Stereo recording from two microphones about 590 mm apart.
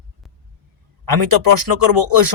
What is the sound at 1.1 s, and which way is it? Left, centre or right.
Speech, right.